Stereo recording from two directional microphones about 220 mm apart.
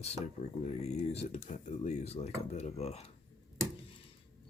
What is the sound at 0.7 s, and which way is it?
Speech, 30° left (ahead or behind).